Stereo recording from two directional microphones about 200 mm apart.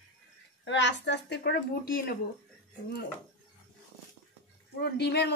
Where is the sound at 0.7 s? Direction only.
60° left (ahead or behind).